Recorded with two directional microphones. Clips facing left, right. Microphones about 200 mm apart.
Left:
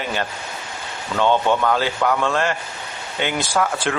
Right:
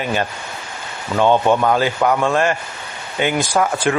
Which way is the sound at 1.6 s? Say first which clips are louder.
Right 3 dB; 20° right (ahead or behind).